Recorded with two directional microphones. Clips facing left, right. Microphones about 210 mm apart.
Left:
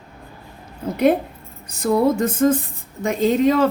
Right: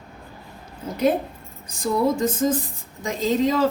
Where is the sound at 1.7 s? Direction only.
60° left (ahead or behind).